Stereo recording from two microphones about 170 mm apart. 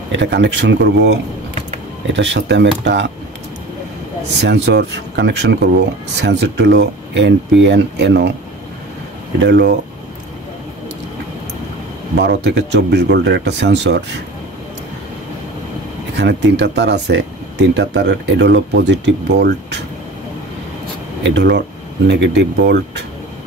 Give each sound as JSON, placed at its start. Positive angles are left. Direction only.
{"t": 0.1, "sound": "speech", "side_deg": -90}
{"t": 2.1, "sound": "speech", "side_deg": -90}
{"t": 4.3, "sound": "speech", "side_deg": -90}
{"t": 9.4, "sound": "speech", "side_deg": -80}
{"t": 12.2, "sound": "speech", "side_deg": -90}
{"t": 16.2, "sound": "speech", "side_deg": -90}
{"t": 21.2, "sound": "speech", "side_deg": -90}